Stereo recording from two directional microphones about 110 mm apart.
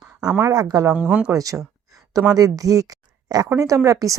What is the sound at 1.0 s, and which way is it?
Speech, 10° right (ahead or behind).